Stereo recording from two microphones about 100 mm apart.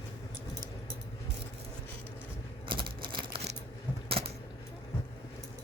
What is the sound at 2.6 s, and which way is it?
Typewriter, 55° right (ahead or behind).